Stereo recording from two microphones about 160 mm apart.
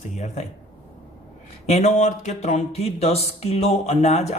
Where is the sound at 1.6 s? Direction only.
45° left (ahead or behind).